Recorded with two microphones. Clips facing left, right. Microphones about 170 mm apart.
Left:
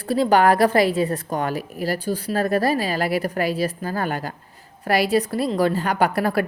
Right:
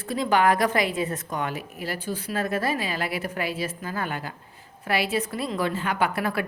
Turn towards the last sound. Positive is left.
turn(degrees=35)  # may be behind; listen again after turning